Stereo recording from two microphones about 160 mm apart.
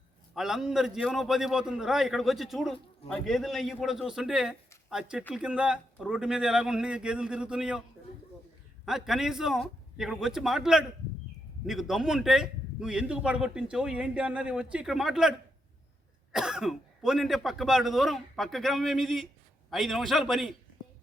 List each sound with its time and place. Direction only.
0.3 s a man's voice: 5° right (ahead or behind)